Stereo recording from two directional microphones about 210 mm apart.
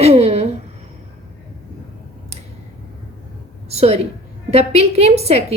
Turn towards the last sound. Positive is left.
turn(degrees=-30)  # may be behind; listen again after turning